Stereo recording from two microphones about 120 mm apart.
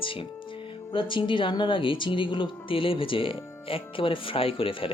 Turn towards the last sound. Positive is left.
turn(degrees=50)  # may be behind; listen again after turning